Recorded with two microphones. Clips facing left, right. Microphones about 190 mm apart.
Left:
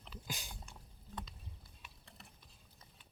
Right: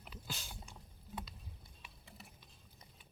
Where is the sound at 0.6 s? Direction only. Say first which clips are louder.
Right 1 dB; 5° right (ahead or behind).